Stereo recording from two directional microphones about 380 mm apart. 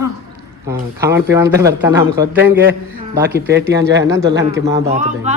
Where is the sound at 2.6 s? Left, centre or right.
Right.